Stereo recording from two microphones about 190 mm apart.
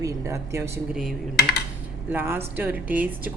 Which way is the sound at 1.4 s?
60° left (ahead or behind).